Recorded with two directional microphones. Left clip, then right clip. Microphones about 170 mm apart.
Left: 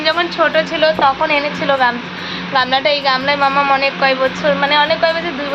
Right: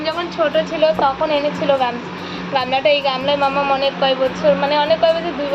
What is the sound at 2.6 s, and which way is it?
Speech, centre (ahead or behind).